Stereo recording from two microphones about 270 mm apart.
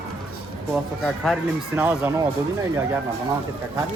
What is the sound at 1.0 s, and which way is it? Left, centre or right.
Speech, centre.